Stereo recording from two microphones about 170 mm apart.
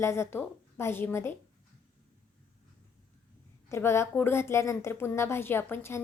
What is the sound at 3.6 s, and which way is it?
A woman's voice, 15° left (ahead or behind).